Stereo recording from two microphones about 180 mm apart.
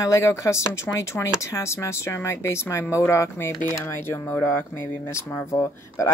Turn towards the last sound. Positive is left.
turn(degrees=15)  # may be behind; listen again after turning